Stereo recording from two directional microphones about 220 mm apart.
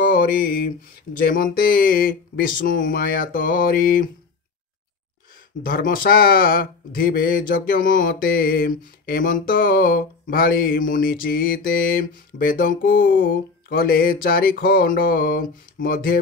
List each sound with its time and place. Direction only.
0.0 s speech: 40° left (ahead or behind)
5.6 s speech: 40° left (ahead or behind)